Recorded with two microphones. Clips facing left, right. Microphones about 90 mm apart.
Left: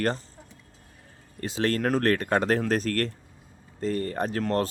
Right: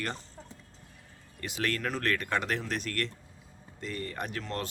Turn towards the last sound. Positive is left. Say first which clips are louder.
# left 10 dB
turn(degrees=40)  # may be behind; listen again after turning